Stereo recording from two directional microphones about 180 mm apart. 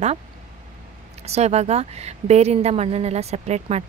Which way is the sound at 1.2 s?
35° right (ahead or behind).